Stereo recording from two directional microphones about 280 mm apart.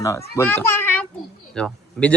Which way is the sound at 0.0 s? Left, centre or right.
Centre.